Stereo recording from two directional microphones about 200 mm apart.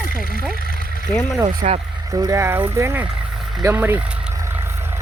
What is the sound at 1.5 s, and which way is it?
Speech, 45° right (ahead or behind).